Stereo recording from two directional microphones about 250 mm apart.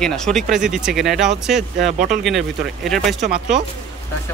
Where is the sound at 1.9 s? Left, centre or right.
Right.